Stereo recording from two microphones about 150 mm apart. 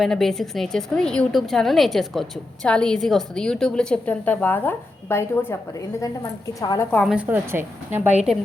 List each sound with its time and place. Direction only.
0.0 s a woman's voice: centre (ahead or behind)
6.6 s a woman's voice: 25° left (ahead or behind)
6.9 s a woman's voice: centre (ahead or behind)
7.3 s a woman's voice: 15° right (ahead or behind)